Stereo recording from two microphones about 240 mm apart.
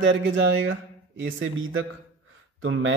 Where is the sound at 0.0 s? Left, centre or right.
Right.